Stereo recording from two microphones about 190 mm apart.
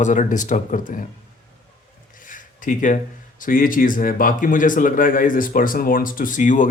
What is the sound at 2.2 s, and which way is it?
Speech, 45° left (ahead or behind).